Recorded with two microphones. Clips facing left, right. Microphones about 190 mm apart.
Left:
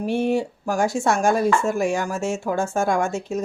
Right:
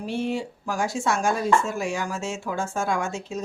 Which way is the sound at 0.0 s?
55° left (ahead or behind).